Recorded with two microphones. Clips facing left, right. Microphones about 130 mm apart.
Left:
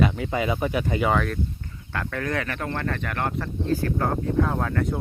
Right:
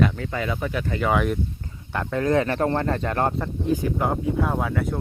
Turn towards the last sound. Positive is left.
turn(degrees=-5)  # may be behind; listen again after turning